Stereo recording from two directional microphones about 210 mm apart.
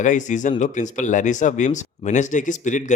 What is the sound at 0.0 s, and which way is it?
Speech, 35° left (ahead or behind).